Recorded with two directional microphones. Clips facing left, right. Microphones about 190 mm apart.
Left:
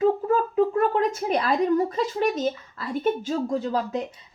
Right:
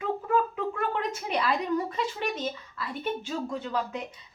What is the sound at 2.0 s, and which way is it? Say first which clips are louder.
Speech: left 7 dB; 40° left (ahead or behind).